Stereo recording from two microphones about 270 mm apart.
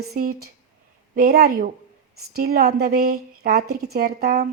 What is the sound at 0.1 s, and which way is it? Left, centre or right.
Speech, right.